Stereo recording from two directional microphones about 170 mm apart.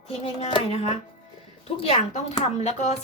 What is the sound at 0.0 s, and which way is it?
Speech, 40° left (ahead or behind).